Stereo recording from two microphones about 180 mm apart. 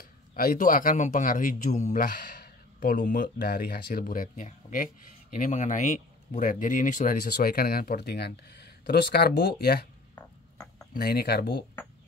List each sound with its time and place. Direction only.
0.0 s speech: 50° left (ahead or behind)
7.2 s speech: 55° left (ahead or behind)
10.9 s speech: 60° left (ahead or behind)